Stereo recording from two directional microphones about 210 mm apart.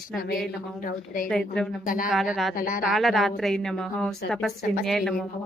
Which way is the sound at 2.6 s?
40° left (ahead or behind).